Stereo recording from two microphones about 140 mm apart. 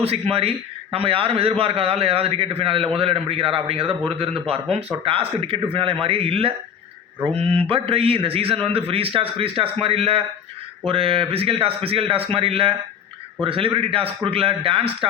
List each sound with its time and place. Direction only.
0.0 s a man's voice: 45° right (ahead or behind)